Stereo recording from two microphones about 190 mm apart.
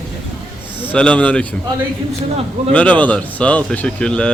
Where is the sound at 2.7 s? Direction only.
5° left (ahead or behind).